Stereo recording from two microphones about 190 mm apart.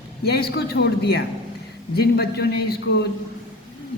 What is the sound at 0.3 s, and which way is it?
A man's voice, 55° left (ahead or behind).